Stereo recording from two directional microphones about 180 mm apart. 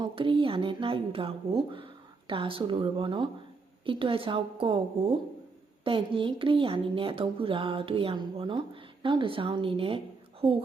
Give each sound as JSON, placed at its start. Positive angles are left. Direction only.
{"t": 0.0, "sound": "a woman's voice", "side_deg": -25}